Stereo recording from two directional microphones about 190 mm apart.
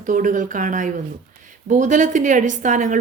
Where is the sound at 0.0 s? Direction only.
45° right (ahead or behind).